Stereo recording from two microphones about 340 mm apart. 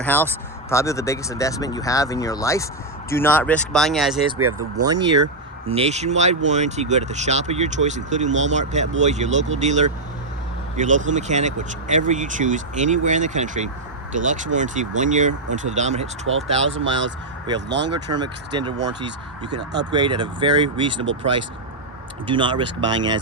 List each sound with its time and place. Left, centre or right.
0.0 s speech: centre
4.4 s speech: right
4.9 s speech: centre
16.2 s speech: right
18.1 s speech: centre
19.9 s speech: centre
22.3 s speech: centre